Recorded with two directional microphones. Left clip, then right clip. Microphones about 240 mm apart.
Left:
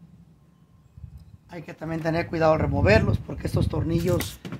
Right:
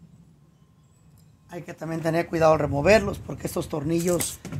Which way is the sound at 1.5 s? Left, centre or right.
Right.